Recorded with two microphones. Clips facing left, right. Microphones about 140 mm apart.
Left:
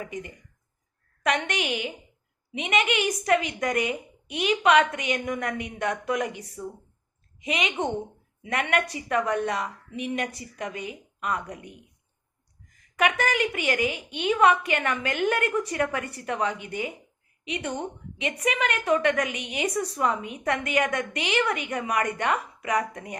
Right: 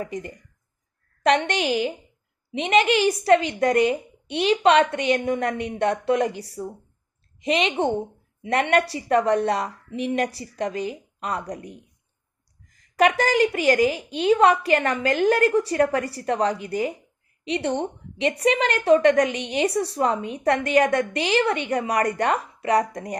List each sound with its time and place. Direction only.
0.0 s a woman's voice: 35° right (ahead or behind)